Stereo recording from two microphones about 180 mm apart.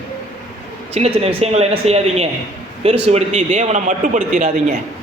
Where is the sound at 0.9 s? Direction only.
35° right (ahead or behind).